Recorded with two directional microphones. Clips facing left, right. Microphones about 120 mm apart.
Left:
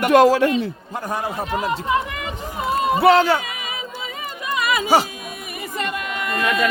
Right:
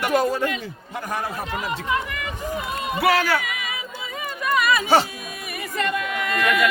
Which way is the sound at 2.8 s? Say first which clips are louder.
Left 7 dB; 30° left (ahead or behind).